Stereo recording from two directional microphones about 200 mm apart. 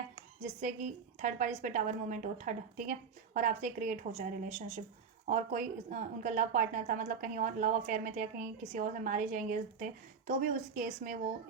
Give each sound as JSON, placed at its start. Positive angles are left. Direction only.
{"t": 0.6, "sound": "a woman's voice", "side_deg": -40}